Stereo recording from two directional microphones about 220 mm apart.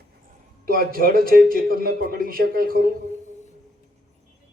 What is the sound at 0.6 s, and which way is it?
A man's voice, 40° right (ahead or behind).